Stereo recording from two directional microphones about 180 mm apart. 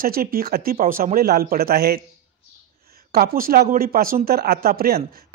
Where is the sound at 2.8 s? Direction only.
55° right (ahead or behind).